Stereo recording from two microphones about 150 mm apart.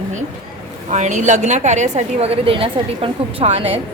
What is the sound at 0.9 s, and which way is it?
A woman's voice, 55° right (ahead or behind).